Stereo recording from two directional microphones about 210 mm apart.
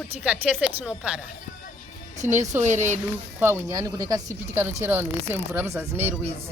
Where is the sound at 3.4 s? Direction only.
15° right (ahead or behind).